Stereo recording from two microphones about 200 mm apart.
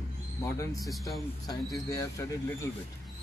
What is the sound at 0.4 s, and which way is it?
Speech, 15° left (ahead or behind).